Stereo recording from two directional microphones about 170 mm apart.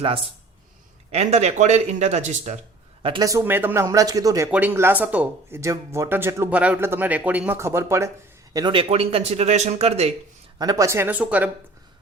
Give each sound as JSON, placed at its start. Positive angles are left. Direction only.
{"t": 0.0, "sound": "speech", "side_deg": -35}
{"t": 3.0, "sound": "speech", "side_deg": -25}
{"t": 4.5, "sound": "speech", "side_deg": -10}
{"t": 8.5, "sound": "speech", "side_deg": -30}
{"t": 10.6, "sound": "speech", "side_deg": -20}